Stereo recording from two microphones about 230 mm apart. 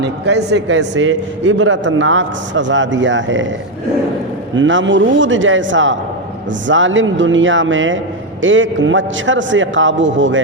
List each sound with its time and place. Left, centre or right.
0.0 s a man's voice: right
4.5 s a man's voice: right